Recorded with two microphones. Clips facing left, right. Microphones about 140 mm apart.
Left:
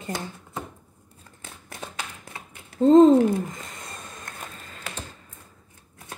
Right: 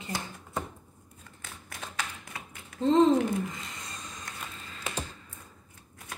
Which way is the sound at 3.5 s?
50° left (ahead or behind).